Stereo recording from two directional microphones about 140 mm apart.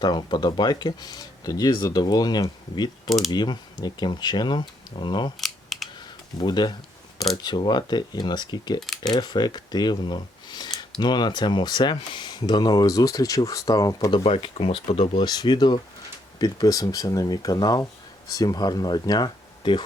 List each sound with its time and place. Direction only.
0.0 s speech: 30° left (ahead or behind)
5.4 s camera: centre (ahead or behind)
6.0 s a sound: 30° left (ahead or behind)
7.4 s speech: 30° left (ahead or behind)
14.3 s speech: 45° left (ahead or behind)